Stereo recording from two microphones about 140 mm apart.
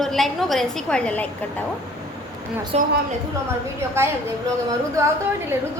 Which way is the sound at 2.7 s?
50° right (ahead or behind).